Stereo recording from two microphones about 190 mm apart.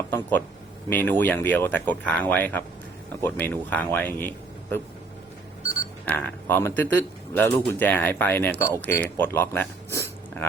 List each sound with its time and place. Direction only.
0.1 s speech: 10° left (ahead or behind)
5.8 s speech: 10° left (ahead or behind)
9.0 s a sound: 10° left (ahead or behind)